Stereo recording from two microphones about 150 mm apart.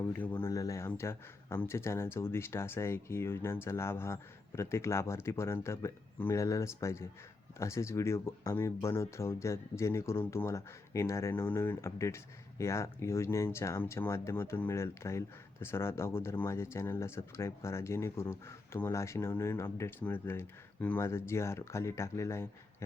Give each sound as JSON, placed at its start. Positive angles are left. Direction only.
{"t": 0.0, "sound": "speech", "side_deg": 10}
{"t": 0.5, "sound": "speech", "side_deg": 20}